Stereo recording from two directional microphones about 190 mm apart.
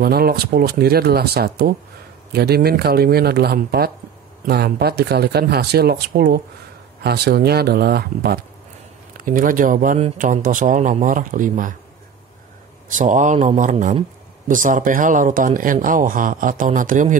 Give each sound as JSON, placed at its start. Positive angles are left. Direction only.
{"t": 0.0, "sound": "speech", "side_deg": -55}
{"t": 12.9, "sound": "speech", "side_deg": -40}